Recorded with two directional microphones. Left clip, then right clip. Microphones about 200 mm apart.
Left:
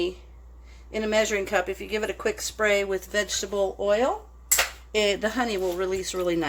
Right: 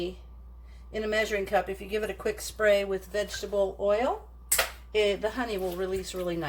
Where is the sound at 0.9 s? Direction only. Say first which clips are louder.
Left 4 dB; 45° left (ahead or behind).